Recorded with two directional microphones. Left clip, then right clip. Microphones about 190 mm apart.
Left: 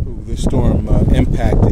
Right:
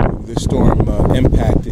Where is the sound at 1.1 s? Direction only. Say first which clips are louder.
Right 3 dB; 5° right (ahead or behind).